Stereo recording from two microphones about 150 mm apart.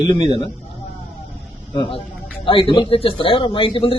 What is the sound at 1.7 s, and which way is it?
A man's voice, 30° left (ahead or behind).